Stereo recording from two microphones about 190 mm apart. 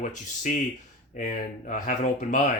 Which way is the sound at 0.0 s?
40° left (ahead or behind).